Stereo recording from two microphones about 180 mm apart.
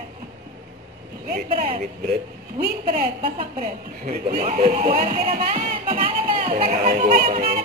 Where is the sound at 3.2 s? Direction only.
45° right (ahead or behind).